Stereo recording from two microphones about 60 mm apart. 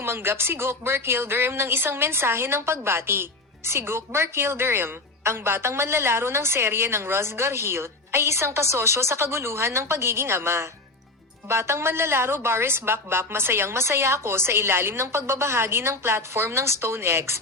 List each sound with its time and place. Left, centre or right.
0.0 s speech: right